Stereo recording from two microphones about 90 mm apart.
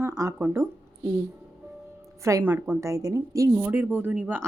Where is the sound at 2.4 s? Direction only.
20° right (ahead or behind).